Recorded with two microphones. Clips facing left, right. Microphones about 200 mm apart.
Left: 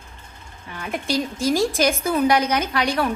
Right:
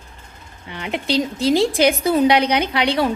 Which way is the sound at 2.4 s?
65° right (ahead or behind).